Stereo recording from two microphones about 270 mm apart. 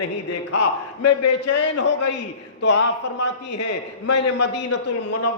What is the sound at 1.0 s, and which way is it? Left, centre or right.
Speech, left.